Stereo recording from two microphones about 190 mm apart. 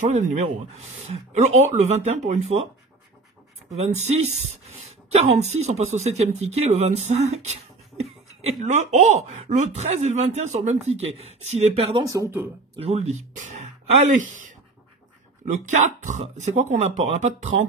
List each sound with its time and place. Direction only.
0.1 s speech: 40° right (ahead or behind)
3.7 s speech: 35° right (ahead or behind)
12.1 s speech: 15° right (ahead or behind)
12.7 s speech: 35° right (ahead or behind)